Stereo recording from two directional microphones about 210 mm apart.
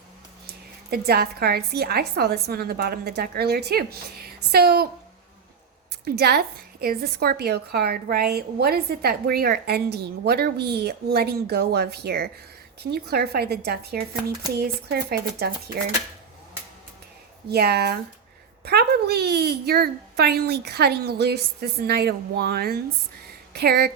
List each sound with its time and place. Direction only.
0.4 s a woman's voice: 50° right (ahead or behind)
6.1 s a woman's voice: 50° right (ahead or behind)
17.5 s a woman's voice: 50° right (ahead or behind)